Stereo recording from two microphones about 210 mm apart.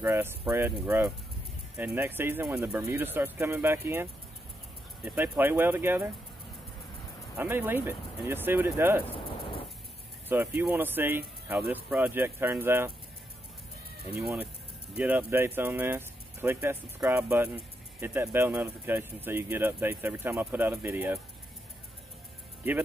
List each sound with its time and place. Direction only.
0.0 s speech: 10° right (ahead or behind)
7.3 s speech: 10° right (ahead or behind)
10.2 s speech: 10° right (ahead or behind)
14.2 s speech: centre (ahead or behind)